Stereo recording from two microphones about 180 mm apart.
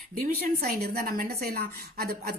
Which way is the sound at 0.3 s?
55° right (ahead or behind).